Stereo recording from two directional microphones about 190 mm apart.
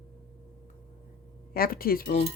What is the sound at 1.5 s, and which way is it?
Speech, 50° left (ahead or behind).